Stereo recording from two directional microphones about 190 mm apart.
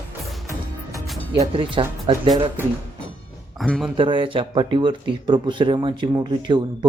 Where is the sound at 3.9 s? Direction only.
25° right (ahead or behind).